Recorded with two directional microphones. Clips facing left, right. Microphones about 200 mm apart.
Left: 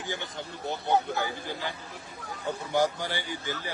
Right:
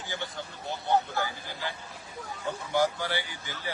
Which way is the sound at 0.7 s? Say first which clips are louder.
Left 1 dB; 20° left (ahead or behind).